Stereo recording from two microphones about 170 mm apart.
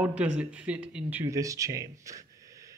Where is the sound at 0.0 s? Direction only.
5° right (ahead or behind).